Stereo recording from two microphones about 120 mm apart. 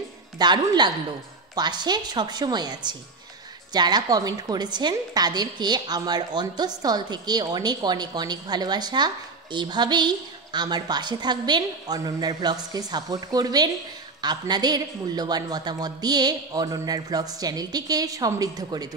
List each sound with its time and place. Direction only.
0.4 s a woman's voice: 35° right (ahead or behind)